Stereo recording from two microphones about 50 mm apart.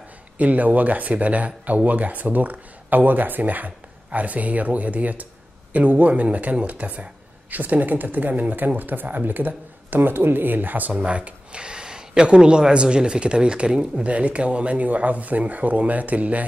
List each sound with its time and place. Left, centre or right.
0.4 s speech: right
11.1 s speech: right